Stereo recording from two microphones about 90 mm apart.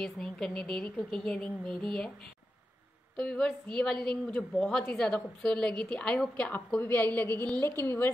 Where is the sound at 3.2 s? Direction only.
10° left (ahead or behind).